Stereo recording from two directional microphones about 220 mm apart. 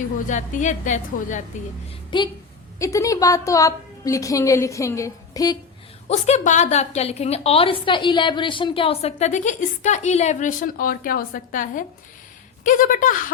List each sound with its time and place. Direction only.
0.3 s a woman's voice: 35° left (ahead or behind)
2.0 s a woman's voice: 20° left (ahead or behind)
6.1 s a woman's voice: 30° left (ahead or behind)